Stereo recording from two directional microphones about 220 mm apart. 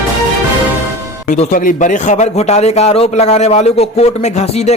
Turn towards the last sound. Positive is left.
turn(degrees=30)  # may be behind; listen again after turning